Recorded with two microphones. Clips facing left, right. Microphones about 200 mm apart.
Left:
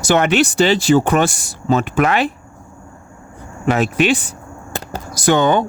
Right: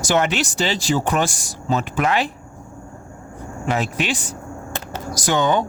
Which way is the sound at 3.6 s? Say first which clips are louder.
Left 7 dB; 65° left (ahead or behind).